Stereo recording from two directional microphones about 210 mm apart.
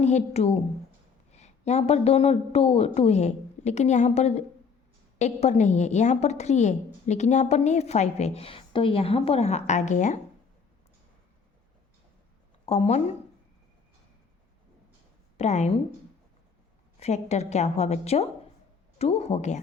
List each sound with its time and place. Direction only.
0.0 s a woman's voice: 35° left (ahead or behind)
12.6 s speech: 30° left (ahead or behind)
15.4 s a woman's voice: 30° left (ahead or behind)
17.0 s a woman's voice: 30° left (ahead or behind)